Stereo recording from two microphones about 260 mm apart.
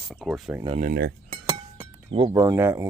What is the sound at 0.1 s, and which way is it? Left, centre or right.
Speech, centre.